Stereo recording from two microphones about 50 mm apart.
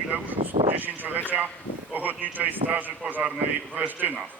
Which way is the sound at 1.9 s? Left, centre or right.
Right.